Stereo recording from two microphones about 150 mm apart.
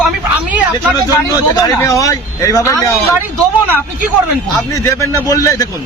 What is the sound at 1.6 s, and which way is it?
Speech, 20° left (ahead or behind).